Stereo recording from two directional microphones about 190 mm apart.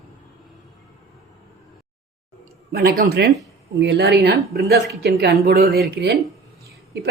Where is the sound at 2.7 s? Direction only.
55° right (ahead or behind).